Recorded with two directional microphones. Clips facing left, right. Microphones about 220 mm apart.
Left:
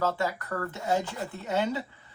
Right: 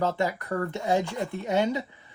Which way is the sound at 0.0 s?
15° right (ahead or behind).